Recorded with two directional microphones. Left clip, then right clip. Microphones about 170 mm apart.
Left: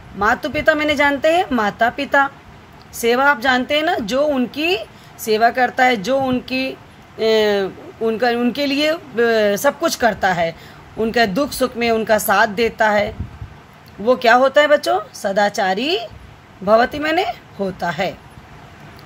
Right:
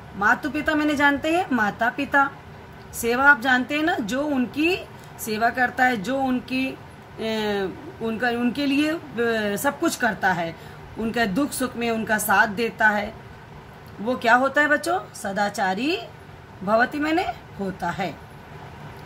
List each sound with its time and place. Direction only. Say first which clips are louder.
0.2 s a woman's voice: left 4 dB; 45° left (ahead or behind)